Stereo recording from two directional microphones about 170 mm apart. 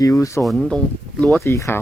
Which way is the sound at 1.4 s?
15° left (ahead or behind).